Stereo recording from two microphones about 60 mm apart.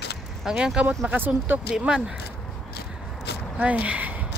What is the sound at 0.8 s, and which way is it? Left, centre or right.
Speech, right.